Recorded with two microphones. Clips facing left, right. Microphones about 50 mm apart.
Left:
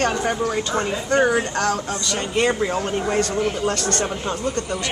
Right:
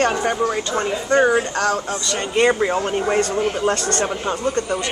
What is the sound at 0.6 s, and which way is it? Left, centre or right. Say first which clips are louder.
Speech: right 1 dB; centre.